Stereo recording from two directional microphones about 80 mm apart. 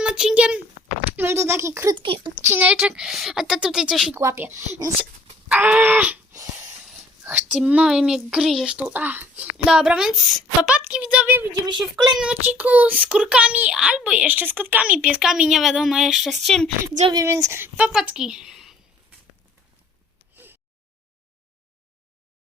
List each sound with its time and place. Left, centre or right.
0.0 s a child's voice: centre
1.1 s speech: right
2.0 s speech: right
2.5 s speech: right
2.9 s speech: centre
4.1 s speech: right
5.5 s speech: centre
6.8 s a sound: centre
7.9 s a woman's voice: centre
17.2 s speech: right
17.6 s a woman's voice: centre
20.3 s a sound: right